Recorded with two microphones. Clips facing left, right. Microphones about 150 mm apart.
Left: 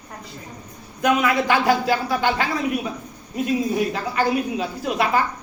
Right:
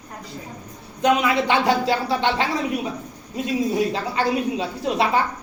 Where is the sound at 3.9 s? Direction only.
25° right (ahead or behind).